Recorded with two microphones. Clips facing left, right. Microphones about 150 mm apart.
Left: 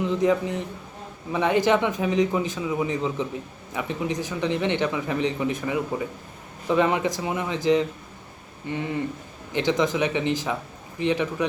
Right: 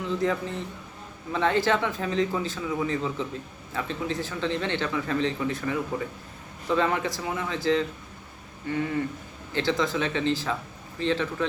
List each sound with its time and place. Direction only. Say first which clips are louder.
0.0 s speech: left 5 dB; 20° left (ahead or behind)